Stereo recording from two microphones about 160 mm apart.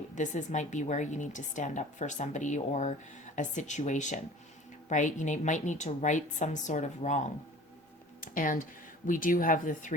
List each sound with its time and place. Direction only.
0.2 s a woman's voice: 50° left (ahead or behind)
8.2 s speech: 60° left (ahead or behind)